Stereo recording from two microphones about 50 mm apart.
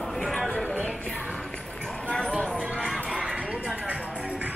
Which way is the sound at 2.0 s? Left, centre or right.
Centre.